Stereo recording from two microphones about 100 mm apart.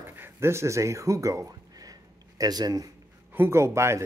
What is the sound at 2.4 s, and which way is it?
Speech, 40° right (ahead or behind).